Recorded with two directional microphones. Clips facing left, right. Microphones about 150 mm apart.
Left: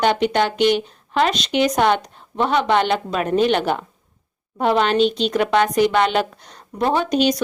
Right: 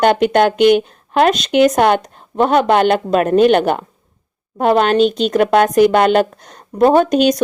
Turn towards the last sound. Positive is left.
turn(degrees=-50)  # may be behind; listen again after turning